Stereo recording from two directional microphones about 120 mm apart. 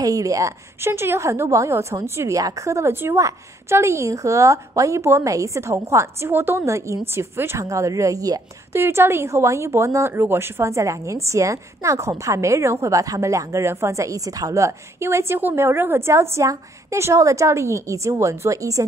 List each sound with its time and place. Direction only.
0.0 s a woman's voice: 30° right (ahead or behind)